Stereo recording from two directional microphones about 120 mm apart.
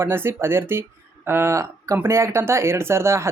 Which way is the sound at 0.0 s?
20° right (ahead or behind).